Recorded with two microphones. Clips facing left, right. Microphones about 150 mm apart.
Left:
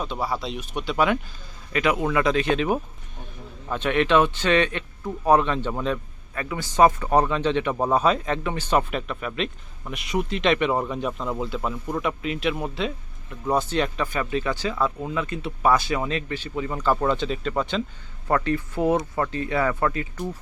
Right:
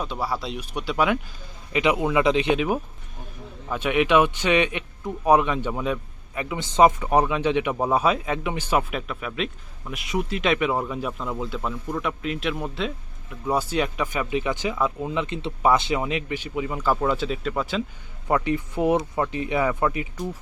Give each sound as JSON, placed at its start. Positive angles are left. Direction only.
{"t": 0.0, "sound": "speech", "side_deg": -5}
{"t": 1.7, "sound": "a man's voice", "side_deg": -15}
{"t": 2.6, "sound": "a man's voice", "side_deg": 0}
{"t": 18.3, "sound": "a man's voice", "side_deg": -15}